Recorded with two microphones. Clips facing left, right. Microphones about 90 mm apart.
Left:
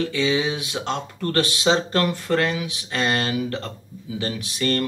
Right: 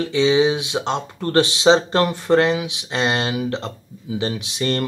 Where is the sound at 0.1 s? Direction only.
25° right (ahead or behind).